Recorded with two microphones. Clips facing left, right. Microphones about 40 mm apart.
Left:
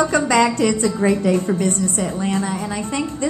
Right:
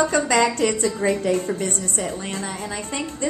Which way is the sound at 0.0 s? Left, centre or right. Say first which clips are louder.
Left 3 dB; left.